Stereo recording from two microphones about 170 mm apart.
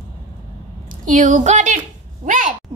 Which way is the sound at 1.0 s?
50° right (ahead or behind).